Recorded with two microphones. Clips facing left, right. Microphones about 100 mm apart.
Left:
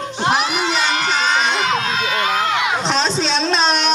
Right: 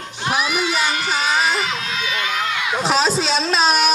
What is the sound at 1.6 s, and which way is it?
Crowd, 40° left (ahead or behind).